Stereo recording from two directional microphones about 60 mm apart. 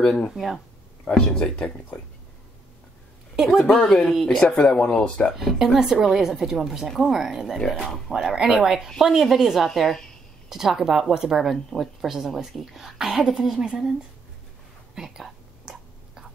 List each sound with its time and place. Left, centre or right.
0.0 s speech: centre
0.3 s a woman's voice: centre
1.0 s speech: centre
3.7 s speech: centre
5.3 s a woman's voice: centre
7.5 s speech: centre
8.1 s a woman's voice: centre
10.5 s a woman's voice: centre
15.0 s whispering: centre